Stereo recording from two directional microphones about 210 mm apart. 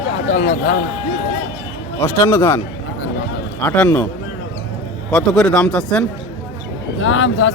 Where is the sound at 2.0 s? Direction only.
10° left (ahead or behind).